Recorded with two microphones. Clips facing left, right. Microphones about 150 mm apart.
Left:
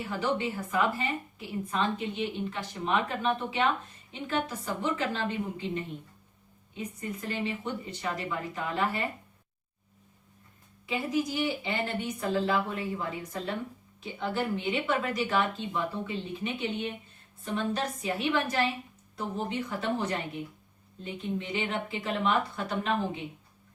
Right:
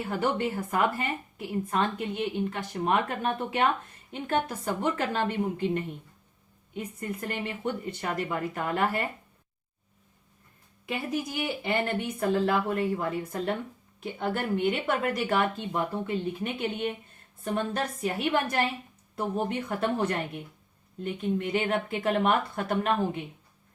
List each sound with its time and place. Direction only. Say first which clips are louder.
0.2 s a woman's voice: right 2 dB; 55° right (ahead or behind)
10.8 s speech: left 2 dB; 60° right (ahead or behind)